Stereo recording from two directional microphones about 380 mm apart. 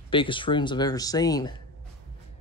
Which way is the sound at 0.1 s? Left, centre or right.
Centre.